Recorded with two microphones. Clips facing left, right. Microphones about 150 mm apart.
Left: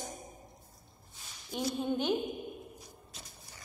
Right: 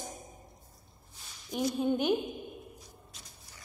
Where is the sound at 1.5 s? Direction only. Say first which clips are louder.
Right 3 dB; 10° right (ahead or behind).